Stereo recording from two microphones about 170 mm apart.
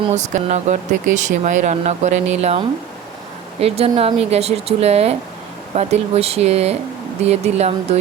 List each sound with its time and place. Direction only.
0.1 s speech: 45° right (ahead or behind)